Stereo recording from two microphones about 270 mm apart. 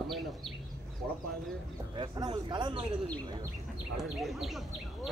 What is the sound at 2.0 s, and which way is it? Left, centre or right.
Speech, centre.